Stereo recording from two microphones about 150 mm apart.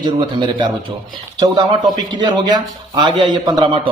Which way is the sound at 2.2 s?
30° right (ahead or behind).